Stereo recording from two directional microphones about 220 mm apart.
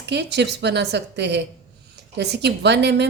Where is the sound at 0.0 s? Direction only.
50° right (ahead or behind).